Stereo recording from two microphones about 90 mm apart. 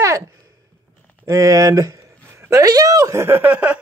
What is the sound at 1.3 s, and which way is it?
Speech, 35° right (ahead or behind).